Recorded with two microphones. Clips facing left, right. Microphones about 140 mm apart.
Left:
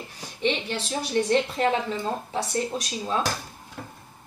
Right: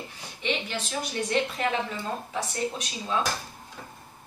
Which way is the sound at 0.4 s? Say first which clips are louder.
Left 4 dB; 35° left (ahead or behind).